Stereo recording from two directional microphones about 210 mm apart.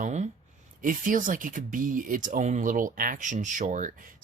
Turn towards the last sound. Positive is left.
turn(degrees=-35)  # may be behind; listen again after turning